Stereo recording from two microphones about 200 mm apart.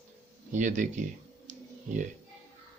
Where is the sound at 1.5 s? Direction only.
40° right (ahead or behind).